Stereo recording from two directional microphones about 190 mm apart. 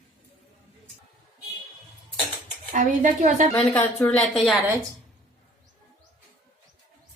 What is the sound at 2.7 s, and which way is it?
Speech, 45° right (ahead or behind).